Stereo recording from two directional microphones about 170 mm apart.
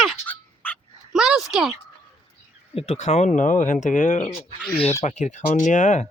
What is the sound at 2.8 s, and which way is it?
Speech, 40° left (ahead or behind).